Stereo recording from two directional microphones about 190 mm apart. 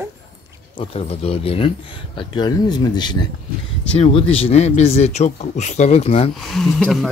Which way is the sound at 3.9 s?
35° left (ahead or behind).